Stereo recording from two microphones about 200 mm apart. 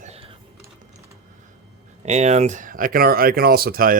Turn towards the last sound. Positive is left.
turn(degrees=-45)  # may be behind; listen again after turning